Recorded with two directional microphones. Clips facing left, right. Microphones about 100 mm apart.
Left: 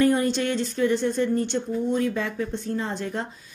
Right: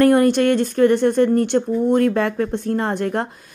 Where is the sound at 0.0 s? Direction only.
65° right (ahead or behind).